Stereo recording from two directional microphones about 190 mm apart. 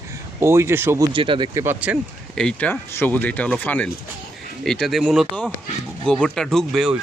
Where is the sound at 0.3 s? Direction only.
15° right (ahead or behind).